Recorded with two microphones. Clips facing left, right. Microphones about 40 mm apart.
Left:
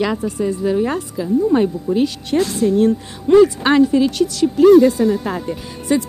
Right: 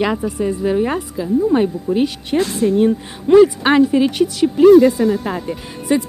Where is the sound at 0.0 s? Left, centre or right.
Centre.